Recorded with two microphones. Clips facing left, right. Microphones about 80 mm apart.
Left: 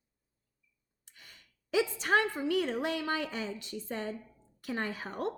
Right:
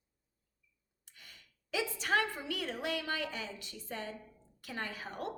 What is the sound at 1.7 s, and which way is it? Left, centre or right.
A woman's voice, left.